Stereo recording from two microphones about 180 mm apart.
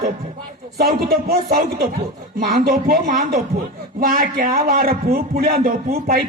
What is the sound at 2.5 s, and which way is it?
A man's voice, 50° right (ahead or behind).